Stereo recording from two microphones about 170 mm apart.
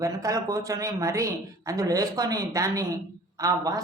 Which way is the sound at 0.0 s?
20° right (ahead or behind).